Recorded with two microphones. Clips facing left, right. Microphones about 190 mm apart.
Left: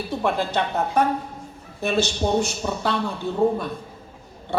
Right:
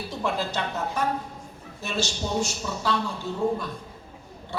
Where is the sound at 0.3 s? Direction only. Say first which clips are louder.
Left 5 dB; 60° left (ahead or behind).